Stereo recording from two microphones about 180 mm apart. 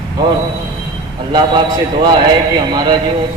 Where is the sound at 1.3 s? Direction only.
25° right (ahead or behind).